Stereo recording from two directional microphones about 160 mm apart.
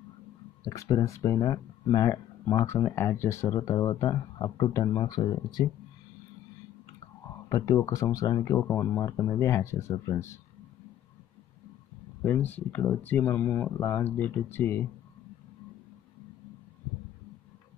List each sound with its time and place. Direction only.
0.7 s speech: 20° left (ahead or behind)
7.4 s speech: 20° left (ahead or behind)
12.2 s speech: 10° left (ahead or behind)